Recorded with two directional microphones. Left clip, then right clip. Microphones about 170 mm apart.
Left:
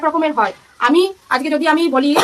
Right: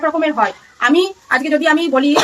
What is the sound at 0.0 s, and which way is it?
A woman's voice, 15° left (ahead or behind).